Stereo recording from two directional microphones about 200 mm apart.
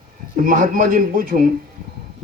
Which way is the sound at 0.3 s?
45° right (ahead or behind).